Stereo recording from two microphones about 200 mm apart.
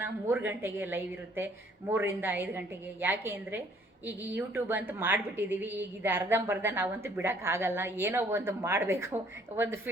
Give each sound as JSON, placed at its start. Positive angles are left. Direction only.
{"t": 0.0, "sound": "a woman's voice", "side_deg": -10}